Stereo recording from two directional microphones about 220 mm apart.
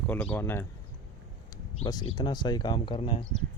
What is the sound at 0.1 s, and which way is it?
Speech, 5° left (ahead or behind).